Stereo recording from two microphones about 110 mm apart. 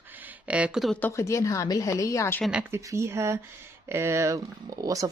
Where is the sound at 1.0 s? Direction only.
25° left (ahead or behind).